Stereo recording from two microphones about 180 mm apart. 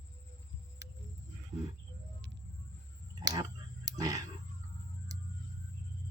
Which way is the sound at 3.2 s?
20° right (ahead or behind).